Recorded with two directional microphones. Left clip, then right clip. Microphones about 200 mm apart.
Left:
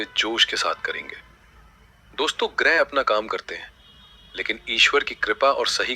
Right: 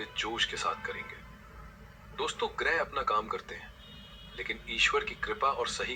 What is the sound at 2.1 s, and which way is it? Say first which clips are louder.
Speech: left 10 dB; 40° left (ahead or behind).